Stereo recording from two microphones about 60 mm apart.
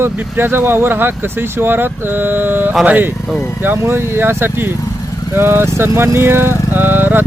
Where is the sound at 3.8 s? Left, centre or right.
Right.